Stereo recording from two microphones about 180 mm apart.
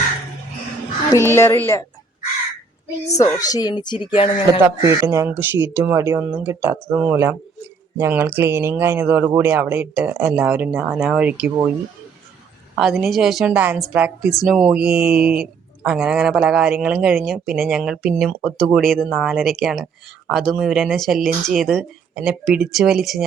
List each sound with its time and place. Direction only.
1.1 s speech: 15° left (ahead or behind)
3.2 s speech: 20° left (ahead or behind)
4.6 s speech: 15° right (ahead or behind)
12.8 s a woman's voice: centre (ahead or behind)